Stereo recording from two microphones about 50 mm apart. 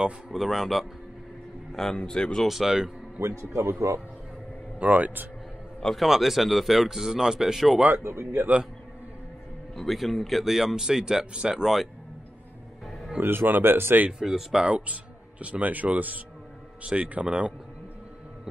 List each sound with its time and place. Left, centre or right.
0.3 s speech: centre
1.7 s a man's voice: centre
2.4 s speech: centre
3.2 s a man's voice: right
4.7 s speech: right
5.9 s speech: centre
8.0 s speech: right
9.8 s speech: centre
13.2 s speech: right
14.2 s speech: centre